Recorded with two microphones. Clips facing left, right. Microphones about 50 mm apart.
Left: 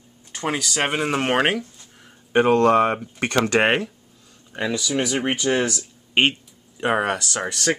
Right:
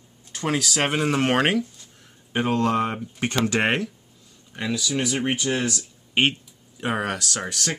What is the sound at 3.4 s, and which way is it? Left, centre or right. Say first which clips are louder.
Speech: left 4 dB; left.